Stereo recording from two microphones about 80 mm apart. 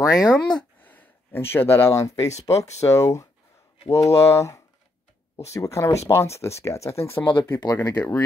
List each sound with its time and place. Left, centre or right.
0.0 s speech: left
0.3 s speech: centre
0.7 s speech: left
7.2 s speech: left
7.6 s speech: left